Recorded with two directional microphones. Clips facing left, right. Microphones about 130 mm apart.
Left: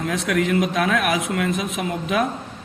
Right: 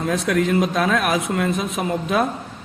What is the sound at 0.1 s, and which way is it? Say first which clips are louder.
A man's voice: right 2 dB; 35° right (ahead or behind).